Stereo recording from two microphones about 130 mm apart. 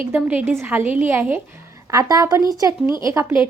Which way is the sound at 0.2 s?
10° right (ahead or behind).